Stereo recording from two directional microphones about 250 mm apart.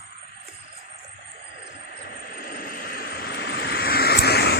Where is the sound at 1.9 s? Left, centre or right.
Left.